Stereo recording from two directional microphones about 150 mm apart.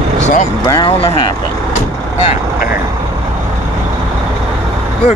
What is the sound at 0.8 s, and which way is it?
Speech, 35° left (ahead or behind).